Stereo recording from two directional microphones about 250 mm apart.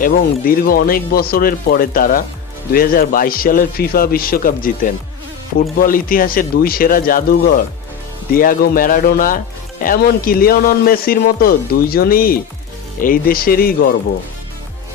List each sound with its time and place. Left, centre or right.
0.0 s a man's voice: left